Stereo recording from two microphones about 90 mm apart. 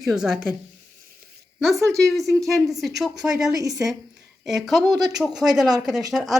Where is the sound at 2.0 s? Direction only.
Centre (ahead or behind).